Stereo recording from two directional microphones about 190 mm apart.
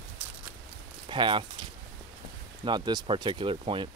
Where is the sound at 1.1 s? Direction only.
25° right (ahead or behind).